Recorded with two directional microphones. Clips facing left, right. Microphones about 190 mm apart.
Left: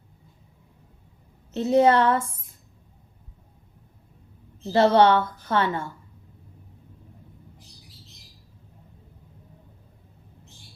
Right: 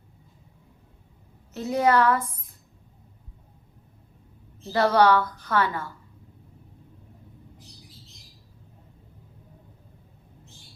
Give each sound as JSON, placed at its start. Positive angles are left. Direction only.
{"t": 1.5, "sound": "a woman's voice", "side_deg": 25}
{"t": 4.7, "sound": "a woman's voice", "side_deg": 25}